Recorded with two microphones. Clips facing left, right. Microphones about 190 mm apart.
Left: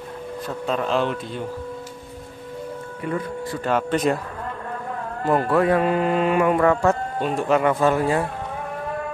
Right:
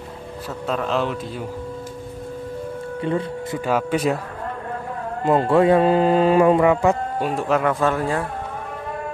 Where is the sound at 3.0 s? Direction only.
25° right (ahead or behind).